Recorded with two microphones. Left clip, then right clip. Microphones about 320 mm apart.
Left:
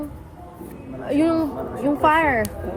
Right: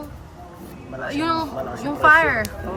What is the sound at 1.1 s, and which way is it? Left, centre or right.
Speech, centre.